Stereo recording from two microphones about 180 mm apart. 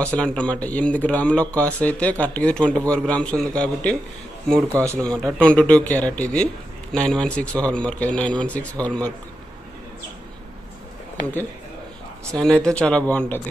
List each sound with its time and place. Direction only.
0.0 s speech: 5° left (ahead or behind)
4.6 s speech: 15° right (ahead or behind)
4.9 s a man's voice: 5° left (ahead or behind)
12.4 s speech: 5° left (ahead or behind)